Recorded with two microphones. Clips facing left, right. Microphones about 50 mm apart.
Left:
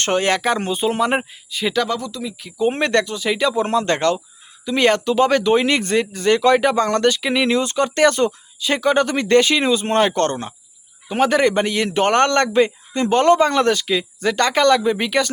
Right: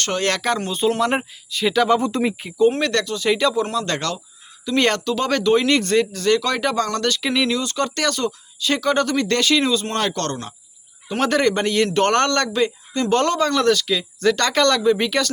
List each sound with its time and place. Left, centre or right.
0.0 s a man's voice: centre
1.9 s speech: right
2.6 s speech: left
3.2 s a man's voice: centre
3.5 s speech: left
4.6 s a man's voice: centre
7.4 s speech: left
11.1 s a man's voice: centre